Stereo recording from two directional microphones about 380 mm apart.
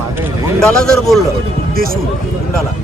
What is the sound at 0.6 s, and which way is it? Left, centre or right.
Speech, centre.